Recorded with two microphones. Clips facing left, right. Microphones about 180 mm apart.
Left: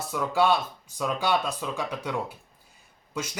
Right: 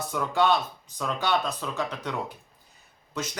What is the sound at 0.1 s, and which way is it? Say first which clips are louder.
Speech: left 1 dB; 10° left (ahead or behind).